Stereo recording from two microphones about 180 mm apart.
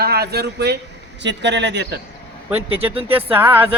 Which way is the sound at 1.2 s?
75° right (ahead or behind).